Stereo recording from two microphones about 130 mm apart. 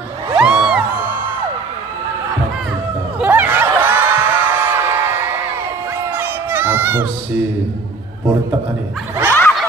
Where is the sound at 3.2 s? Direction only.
15° right (ahead or behind).